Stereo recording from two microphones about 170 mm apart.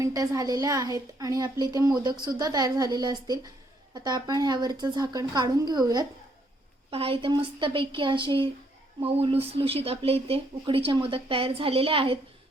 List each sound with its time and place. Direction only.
0.0 s a woman's voice: 20° right (ahead or behind)